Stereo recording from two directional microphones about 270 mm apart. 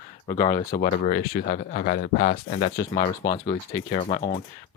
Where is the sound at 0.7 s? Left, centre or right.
Left.